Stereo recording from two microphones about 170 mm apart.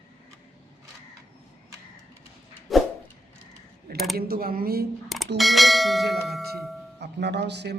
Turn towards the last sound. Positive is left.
turn(degrees=-80)